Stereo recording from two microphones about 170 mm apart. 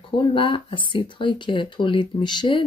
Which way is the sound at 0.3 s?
30° left (ahead or behind).